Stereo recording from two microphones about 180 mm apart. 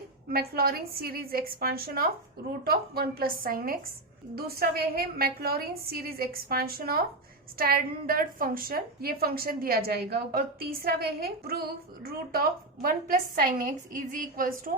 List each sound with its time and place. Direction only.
0.3 s a woman's voice: 55° right (ahead or behind)